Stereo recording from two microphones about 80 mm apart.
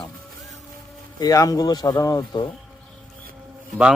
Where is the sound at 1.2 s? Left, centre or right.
Left.